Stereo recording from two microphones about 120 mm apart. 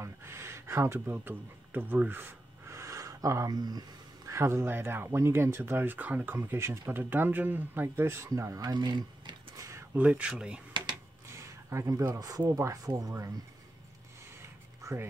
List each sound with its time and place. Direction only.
0.0 s a sound: 20° right (ahead or behind)
4.3 s speech: 20° right (ahead or behind)
8.5 s a sound: 35° right (ahead or behind)
9.9 s speech: 10° right (ahead or behind)
11.3 s speech: 25° right (ahead or behind)
14.8 s dog: 25° right (ahead or behind)